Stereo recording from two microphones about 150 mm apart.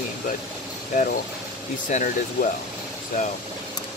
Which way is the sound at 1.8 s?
55° left (ahead or behind).